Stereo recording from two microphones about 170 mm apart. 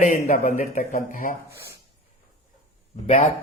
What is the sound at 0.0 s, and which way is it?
A man's voice, 55° left (ahead or behind).